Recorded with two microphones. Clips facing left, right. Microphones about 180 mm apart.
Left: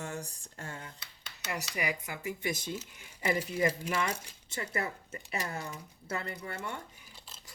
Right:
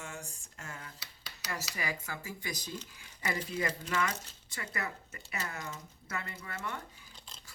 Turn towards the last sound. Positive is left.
turn(degrees=5)  # may be behind; listen again after turning